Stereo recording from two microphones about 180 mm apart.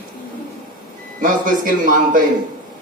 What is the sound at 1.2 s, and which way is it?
Speech, 45° right (ahead or behind).